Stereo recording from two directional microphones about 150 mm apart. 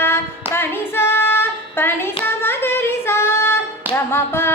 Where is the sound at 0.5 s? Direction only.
15° left (ahead or behind).